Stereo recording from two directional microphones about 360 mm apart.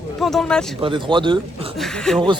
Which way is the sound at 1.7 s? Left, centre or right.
Centre.